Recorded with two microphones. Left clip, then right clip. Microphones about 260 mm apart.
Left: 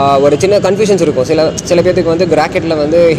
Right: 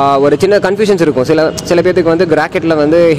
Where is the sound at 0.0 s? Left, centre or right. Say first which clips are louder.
Even; right.